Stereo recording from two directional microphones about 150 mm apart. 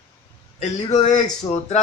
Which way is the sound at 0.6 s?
50° left (ahead or behind).